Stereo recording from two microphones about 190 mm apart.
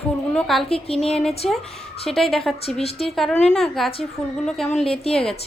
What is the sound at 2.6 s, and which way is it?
Speech, 30° left (ahead or behind).